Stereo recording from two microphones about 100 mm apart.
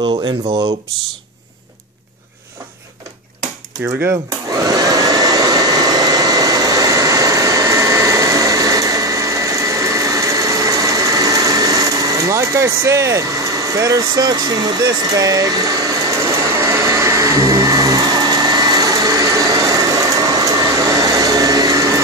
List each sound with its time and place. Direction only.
0.0 s speech: 50° right (ahead or behind)
4.5 s vacuum cleaner: 40° right (ahead or behind)
13.7 s vehicle: 35° right (ahead or behind)